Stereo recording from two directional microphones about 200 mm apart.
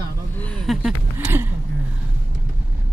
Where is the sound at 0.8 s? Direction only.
5° right (ahead or behind).